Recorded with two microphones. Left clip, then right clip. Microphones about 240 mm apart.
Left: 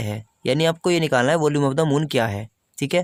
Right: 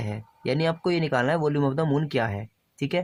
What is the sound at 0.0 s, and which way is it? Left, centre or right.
Speech, left.